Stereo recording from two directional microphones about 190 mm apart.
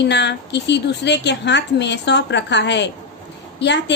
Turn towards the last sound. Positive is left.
turn(degrees=65)  # may be behind; listen again after turning